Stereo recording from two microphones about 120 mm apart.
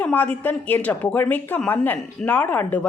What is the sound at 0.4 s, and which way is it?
Speech, 15° left (ahead or behind).